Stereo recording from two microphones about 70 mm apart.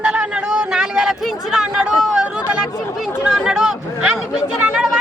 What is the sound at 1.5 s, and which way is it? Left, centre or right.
Chatter, centre.